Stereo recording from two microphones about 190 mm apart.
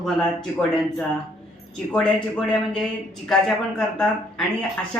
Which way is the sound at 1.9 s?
5° left (ahead or behind).